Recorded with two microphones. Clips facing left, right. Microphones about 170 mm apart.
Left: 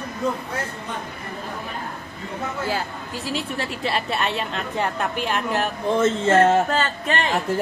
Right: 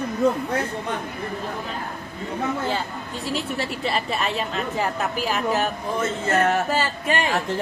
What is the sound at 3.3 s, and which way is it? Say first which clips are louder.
A woman's voice: right 1 dB; centre (ahead or behind).